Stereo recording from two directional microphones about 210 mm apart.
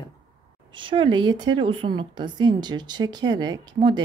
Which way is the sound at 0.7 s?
25° right (ahead or behind).